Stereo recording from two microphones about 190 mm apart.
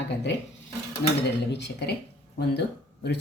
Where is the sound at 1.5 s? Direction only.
65° left (ahead or behind).